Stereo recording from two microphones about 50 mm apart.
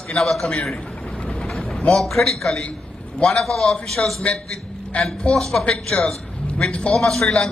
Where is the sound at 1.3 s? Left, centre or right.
Centre.